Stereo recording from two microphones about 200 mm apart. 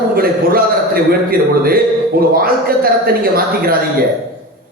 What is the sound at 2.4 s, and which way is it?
Speech, 50° right (ahead or behind).